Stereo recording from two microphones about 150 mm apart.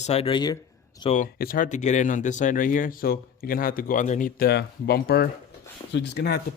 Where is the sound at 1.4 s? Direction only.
70° left (ahead or behind); by 4.3 s 55° left (ahead or behind).